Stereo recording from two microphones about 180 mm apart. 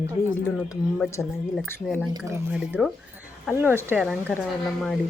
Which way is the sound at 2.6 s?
5° right (ahead or behind).